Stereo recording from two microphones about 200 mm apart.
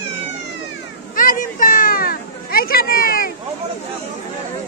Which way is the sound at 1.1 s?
45° left (ahead or behind).